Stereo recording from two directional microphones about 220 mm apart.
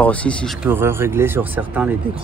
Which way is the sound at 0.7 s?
10° right (ahead or behind).